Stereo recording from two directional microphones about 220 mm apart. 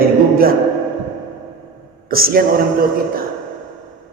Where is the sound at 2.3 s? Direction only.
40° right (ahead or behind).